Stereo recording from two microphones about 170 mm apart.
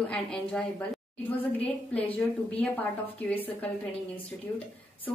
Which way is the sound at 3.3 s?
10° left (ahead or behind).